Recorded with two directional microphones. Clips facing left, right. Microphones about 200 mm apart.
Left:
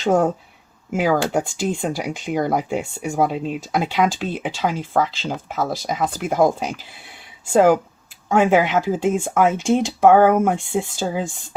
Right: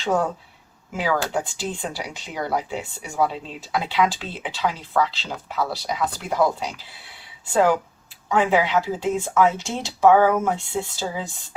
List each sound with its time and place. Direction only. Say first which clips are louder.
0.0 s speech: left 5 dB; 45° left (ahead or behind)